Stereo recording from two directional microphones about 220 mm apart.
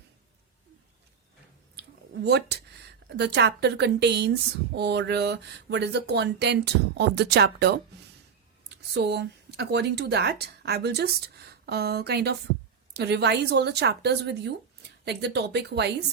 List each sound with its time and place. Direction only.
2.2 s speech: 50° right (ahead or behind)